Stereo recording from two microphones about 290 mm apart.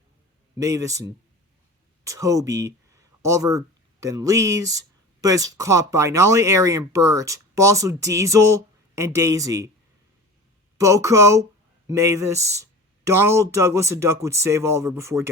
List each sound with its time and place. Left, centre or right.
0.5 s speech: centre
10.8 s speech: centre